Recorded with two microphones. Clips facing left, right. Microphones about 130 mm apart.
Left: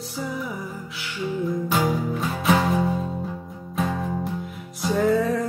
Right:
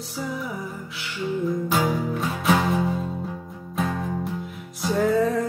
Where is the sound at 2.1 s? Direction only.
Centre (ahead or behind).